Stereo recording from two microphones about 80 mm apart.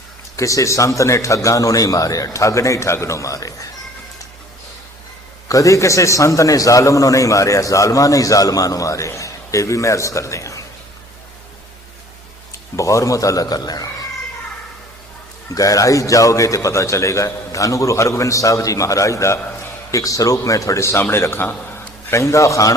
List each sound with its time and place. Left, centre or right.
0.3 s a man's voice: left
5.5 s a man's voice: left
12.5 s speech: left
15.5 s a man's voice: left